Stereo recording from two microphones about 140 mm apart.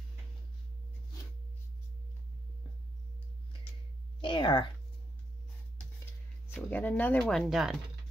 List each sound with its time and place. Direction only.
4.2 s speech: 35° left (ahead or behind)
6.5 s speech: 10° left (ahead or behind)